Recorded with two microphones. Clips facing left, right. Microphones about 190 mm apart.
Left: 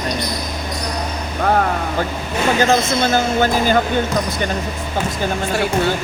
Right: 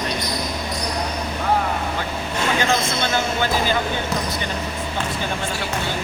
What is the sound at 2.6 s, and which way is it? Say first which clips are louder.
Speech: left 6 dB; 40° left (ahead or behind).